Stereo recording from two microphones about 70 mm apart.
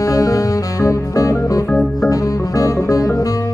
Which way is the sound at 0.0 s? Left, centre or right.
Left.